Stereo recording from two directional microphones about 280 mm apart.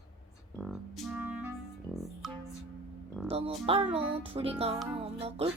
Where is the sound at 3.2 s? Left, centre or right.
Right.